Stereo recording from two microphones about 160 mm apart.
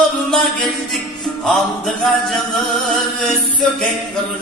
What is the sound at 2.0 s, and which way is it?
Music, centre (ahead or behind).